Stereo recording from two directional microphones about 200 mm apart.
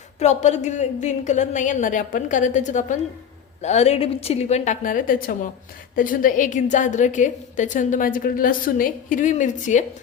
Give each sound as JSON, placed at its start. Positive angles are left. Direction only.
{"t": 0.2, "sound": "a woman's voice", "side_deg": 35}